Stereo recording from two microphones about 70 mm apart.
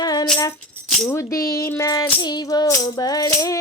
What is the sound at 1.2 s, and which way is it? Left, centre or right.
Music, left.